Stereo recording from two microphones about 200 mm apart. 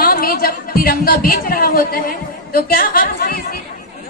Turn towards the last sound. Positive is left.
turn(degrees=45)  # may be behind; listen again after turning